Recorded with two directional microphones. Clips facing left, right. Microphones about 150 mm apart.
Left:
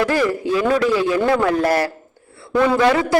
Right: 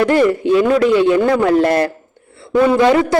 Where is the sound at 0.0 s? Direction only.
20° right (ahead or behind).